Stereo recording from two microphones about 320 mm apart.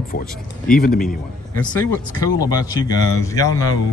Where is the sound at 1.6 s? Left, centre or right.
Centre.